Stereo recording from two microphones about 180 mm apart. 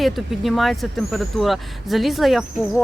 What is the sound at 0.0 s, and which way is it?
Speech, centre (ahead or behind).